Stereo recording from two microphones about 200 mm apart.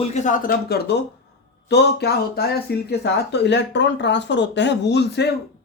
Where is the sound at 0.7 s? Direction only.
55° left (ahead or behind).